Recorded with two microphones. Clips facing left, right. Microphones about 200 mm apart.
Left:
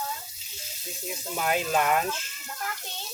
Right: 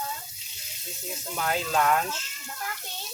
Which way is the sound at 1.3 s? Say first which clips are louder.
Left 1 dB; 15° left (ahead or behind).